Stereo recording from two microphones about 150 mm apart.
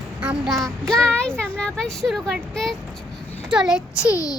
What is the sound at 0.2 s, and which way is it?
Child singing, 5° right (ahead or behind).